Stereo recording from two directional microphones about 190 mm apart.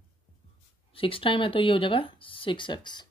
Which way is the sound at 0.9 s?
30° left (ahead or behind).